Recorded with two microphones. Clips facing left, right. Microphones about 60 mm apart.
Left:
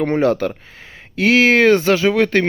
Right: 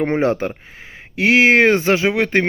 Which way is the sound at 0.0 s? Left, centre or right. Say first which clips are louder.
Left 1 dB; right.